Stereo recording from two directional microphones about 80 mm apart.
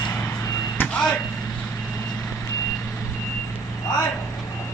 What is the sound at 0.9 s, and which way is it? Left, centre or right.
Vehicle, centre.